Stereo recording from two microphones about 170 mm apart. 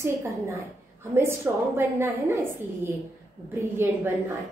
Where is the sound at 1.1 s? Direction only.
15° right (ahead or behind).